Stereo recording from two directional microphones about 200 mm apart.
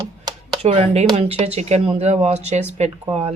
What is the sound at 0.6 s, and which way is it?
Speech, 30° right (ahead or behind).